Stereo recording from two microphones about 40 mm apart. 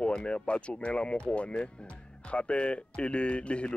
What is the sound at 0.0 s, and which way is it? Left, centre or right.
Speech, left.